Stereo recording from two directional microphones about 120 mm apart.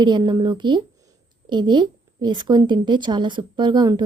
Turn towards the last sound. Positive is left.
turn(degrees=-35)  # may be behind; listen again after turning